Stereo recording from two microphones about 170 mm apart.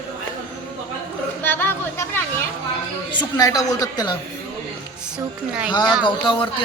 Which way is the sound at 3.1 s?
25° left (ahead or behind).